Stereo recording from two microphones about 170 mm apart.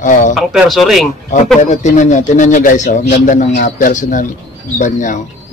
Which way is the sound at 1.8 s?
45° left (ahead or behind).